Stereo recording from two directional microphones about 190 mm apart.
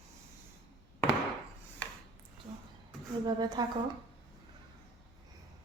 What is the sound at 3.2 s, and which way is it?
Speech, 20° right (ahead or behind).